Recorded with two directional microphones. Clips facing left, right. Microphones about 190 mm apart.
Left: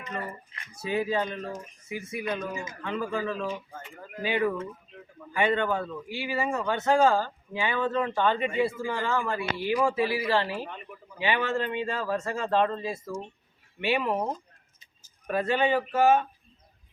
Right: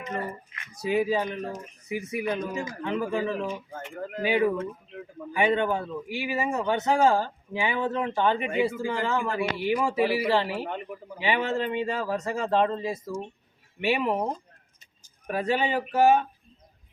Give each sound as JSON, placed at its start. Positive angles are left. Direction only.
{"t": 0.7, "sound": "speech", "side_deg": -15}
{"t": 3.8, "sound": "speech", "side_deg": -60}
{"t": 4.3, "sound": "speech", "side_deg": -15}
{"t": 15.3, "sound": "speech", "side_deg": -15}